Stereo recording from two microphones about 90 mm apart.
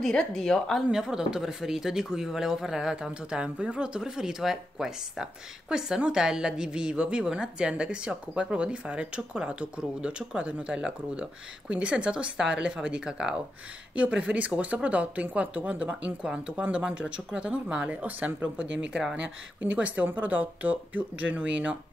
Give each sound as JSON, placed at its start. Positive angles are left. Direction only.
{"t": 0.0, "sound": "a woman's voice", "side_deg": 5}
{"t": 0.8, "sound": "speech", "side_deg": -5}